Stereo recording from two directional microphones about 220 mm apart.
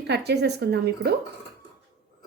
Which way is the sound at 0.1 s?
50° right (ahead or behind).